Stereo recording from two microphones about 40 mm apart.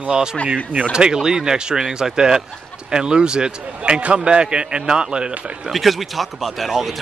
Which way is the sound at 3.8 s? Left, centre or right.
Right.